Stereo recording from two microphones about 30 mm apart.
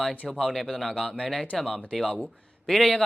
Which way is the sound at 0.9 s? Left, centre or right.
Left.